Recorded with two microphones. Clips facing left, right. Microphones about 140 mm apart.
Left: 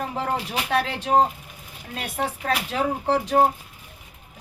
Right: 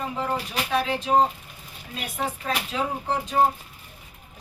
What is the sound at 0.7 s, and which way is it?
Speech, 65° left (ahead or behind).